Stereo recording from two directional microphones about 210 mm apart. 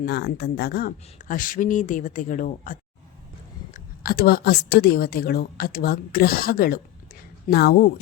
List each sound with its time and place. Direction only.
0.0 s speech: 50° left (ahead or behind)
3.8 s a woman's voice: 45° left (ahead or behind)